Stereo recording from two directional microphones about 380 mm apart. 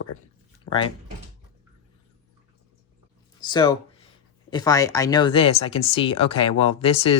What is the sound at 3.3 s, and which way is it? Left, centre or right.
Speech, centre.